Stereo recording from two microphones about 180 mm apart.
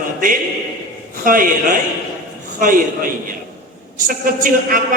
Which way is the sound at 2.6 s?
50° right (ahead or behind).